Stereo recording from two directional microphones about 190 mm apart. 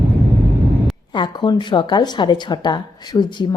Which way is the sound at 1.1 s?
25° left (ahead or behind).